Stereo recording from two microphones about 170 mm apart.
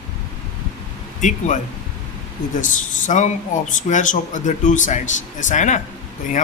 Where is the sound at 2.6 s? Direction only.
50° left (ahead or behind).